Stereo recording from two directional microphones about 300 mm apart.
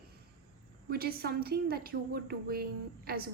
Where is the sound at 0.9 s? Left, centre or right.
Right.